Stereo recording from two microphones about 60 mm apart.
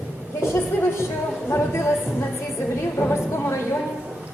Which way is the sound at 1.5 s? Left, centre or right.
Left.